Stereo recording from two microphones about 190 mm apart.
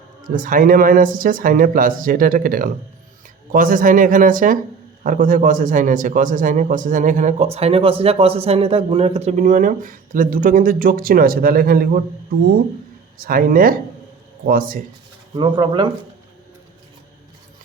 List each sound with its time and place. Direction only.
0.3 s a man's voice: 45° right (ahead or behind)
13.1 s a man's voice: 50° right (ahead or behind)
15.4 s speech: 25° right (ahead or behind)